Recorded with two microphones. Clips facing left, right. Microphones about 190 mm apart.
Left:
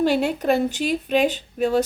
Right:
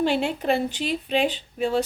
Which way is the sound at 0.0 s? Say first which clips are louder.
Left 3 dB; 40° left (ahead or behind).